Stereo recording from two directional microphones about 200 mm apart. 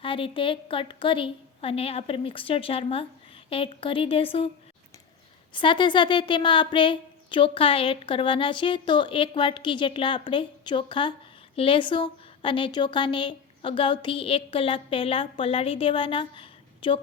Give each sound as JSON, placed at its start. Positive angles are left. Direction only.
{"t": 0.0, "sound": "speech", "side_deg": 25}
{"t": 5.5, "sound": "speech", "side_deg": 25}